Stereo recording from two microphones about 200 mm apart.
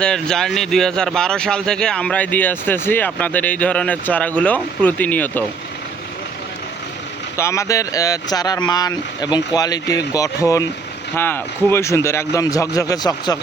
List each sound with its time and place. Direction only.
0.0 s speech: 5° left (ahead or behind)
7.3 s speech: 15° left (ahead or behind)